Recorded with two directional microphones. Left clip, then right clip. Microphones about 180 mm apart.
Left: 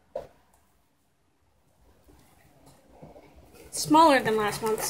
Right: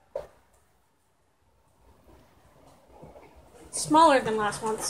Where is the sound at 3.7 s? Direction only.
20° left (ahead or behind).